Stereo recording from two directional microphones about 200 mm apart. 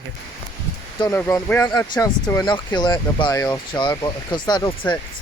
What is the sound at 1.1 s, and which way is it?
Speech, 10° left (ahead or behind).